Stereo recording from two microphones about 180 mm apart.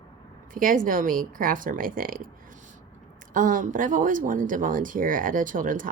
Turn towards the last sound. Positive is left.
turn(degrees=-50)  # may be behind; listen again after turning